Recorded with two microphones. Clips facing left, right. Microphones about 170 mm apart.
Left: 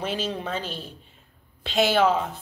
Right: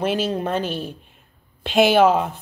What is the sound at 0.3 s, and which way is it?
Speech, 50° right (ahead or behind).